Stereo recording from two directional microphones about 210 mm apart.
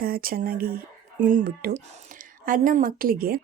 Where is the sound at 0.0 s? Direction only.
45° right (ahead or behind).